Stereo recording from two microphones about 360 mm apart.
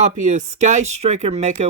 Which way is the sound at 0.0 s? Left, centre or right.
Centre.